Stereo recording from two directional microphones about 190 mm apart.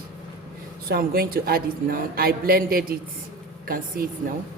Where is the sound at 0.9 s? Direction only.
50° right (ahead or behind).